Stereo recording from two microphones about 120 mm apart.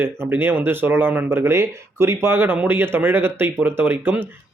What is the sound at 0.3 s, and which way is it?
Speech, 20° right (ahead or behind).